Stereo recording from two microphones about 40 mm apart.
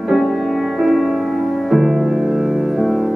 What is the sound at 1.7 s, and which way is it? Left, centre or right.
Music, centre.